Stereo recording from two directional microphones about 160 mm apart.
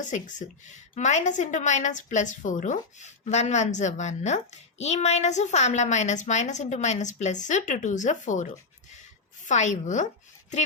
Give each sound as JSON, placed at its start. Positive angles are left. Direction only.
{"t": 0.0, "sound": "a woman's voice", "side_deg": 50}